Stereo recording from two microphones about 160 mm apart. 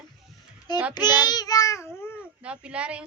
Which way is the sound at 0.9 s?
25° left (ahead or behind).